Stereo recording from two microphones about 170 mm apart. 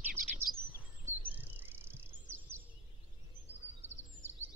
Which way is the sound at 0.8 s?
10° right (ahead or behind).